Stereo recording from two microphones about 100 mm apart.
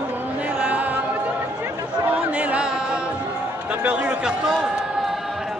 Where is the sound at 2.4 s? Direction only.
10° right (ahead or behind).